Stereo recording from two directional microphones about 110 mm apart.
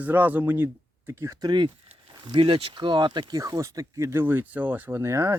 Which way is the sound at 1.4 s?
45° right (ahead or behind).